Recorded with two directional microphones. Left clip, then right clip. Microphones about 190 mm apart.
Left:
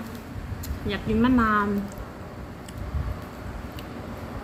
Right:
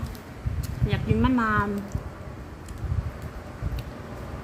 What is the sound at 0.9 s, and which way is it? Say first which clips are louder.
Speech: left 2 dB; centre (ahead or behind).